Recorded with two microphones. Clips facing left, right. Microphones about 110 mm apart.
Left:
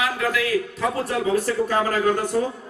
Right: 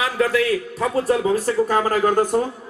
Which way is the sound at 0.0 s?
35° right (ahead or behind).